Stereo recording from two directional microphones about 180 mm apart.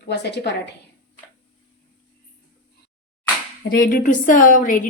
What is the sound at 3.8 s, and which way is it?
A woman's voice, 50° left (ahead or behind).